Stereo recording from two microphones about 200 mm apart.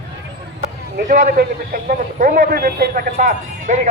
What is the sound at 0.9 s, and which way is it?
A man's voice, 45° right (ahead or behind).